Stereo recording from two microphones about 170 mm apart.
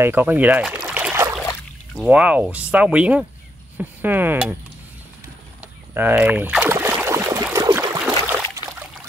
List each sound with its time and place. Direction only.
0.0 s speech: 10° right (ahead or behind)
0.8 s boat: 10° right (ahead or behind)
2.0 s speech: 10° right (ahead or behind)
5.9 s a sound: 10° right (ahead or behind)